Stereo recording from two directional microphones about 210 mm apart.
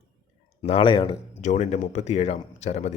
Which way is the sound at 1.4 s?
35° left (ahead or behind).